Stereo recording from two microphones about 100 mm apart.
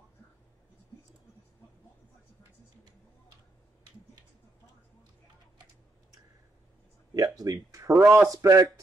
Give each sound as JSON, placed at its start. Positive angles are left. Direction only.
{"t": 7.2, "sound": "a sound", "side_deg": -40}
{"t": 7.9, "sound": "speech", "side_deg": -20}
{"t": 8.3, "sound": "a man's voice", "side_deg": -35}